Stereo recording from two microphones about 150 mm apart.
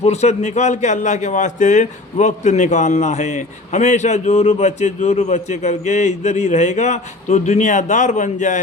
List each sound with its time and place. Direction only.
0.0 s a man's voice: 45° left (ahead or behind)